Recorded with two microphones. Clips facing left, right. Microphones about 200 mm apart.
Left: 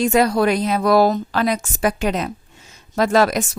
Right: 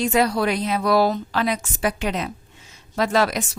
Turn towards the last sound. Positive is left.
turn(degrees=45)  # may be behind; listen again after turning